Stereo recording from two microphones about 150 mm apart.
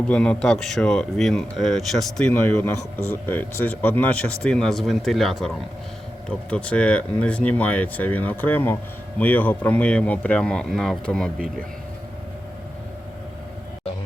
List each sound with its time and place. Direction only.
0.1 s speech: 5° left (ahead or behind)